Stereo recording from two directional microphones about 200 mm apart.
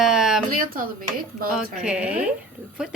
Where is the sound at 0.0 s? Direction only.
Centre (ahead or behind).